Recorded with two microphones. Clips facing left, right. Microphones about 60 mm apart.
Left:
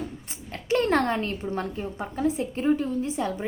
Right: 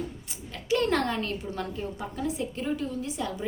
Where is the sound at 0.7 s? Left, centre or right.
Left.